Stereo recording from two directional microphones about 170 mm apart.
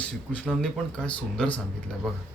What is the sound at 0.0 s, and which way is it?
Speech, 10° left (ahead or behind).